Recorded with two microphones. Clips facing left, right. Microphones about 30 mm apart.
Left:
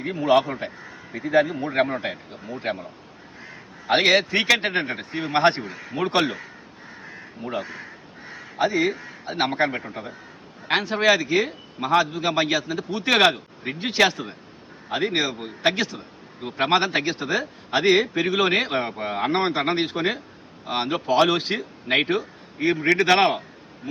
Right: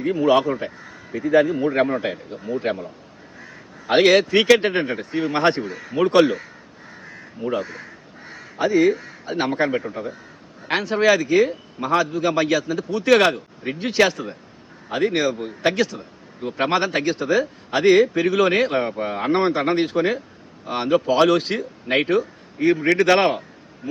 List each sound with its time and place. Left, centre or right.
0.1 s a man's voice: left
7.0 s crow: left
7.5 s a man's voice: left